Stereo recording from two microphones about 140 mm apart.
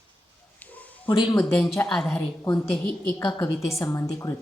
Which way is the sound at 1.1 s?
30° left (ahead or behind).